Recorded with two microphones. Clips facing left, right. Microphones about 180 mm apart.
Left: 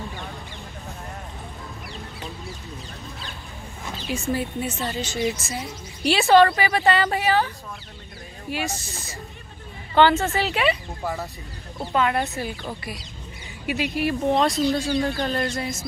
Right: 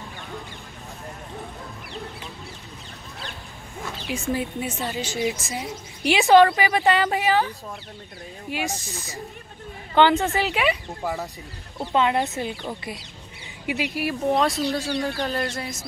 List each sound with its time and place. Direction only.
4.0 s a woman's voice: 15° right (ahead or behind)
13.7 s a woman's voice: 15° right (ahead or behind)
15.0 s chicken: centre (ahead or behind)